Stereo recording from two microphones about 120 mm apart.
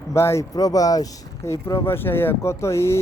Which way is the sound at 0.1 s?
25° left (ahead or behind).